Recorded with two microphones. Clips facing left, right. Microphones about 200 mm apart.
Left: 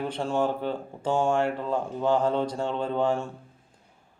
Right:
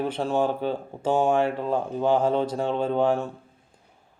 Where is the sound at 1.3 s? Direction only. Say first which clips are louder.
Right 2 dB; 20° right (ahead or behind).